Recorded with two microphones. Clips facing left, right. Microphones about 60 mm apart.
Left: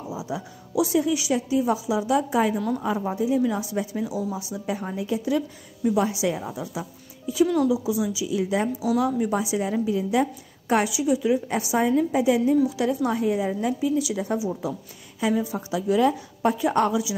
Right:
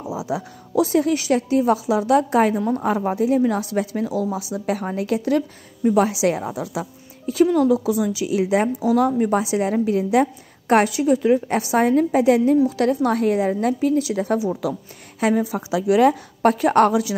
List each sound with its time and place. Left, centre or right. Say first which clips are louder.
0.1 s a sound: right 6 dB; right
0.7 s a woman's voice: right 4 dB; right
2.5 s a woman's voice: right 4 dB; right
2.8 s a woman's voice: right 5 dB; right
5.9 s a woman's voice: right 6 dB; right
7.5 s a woman's voice: right 4 dB; right
7.8 s a woman's voice: right 4 dB; right
8.7 s a woman's voice: right 5 dB; right
10.7 s a woman's voice: right 5 dB; right